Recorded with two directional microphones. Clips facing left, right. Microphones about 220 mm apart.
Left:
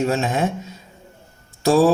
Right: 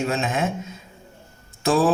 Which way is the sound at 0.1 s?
40° left (ahead or behind).